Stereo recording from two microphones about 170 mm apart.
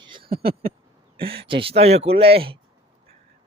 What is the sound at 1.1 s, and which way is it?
Speech, 30° right (ahead or behind).